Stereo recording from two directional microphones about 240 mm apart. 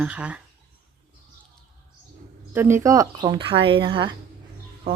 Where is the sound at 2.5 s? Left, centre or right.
Centre.